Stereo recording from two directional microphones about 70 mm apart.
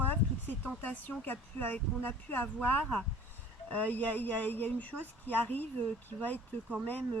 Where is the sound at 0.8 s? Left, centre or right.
Left.